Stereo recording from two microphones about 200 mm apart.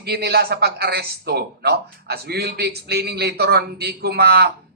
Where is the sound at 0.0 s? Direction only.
55° right (ahead or behind).